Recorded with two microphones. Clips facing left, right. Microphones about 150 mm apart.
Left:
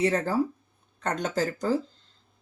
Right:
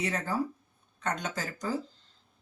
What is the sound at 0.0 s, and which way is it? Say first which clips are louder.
Speech: left 7 dB; 30° left (ahead or behind).